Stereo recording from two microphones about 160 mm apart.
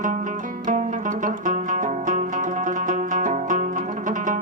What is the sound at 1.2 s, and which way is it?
Music, 55° right (ahead or behind).